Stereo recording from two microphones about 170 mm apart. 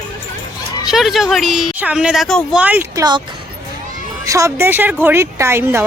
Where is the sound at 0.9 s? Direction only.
Centre (ahead or behind).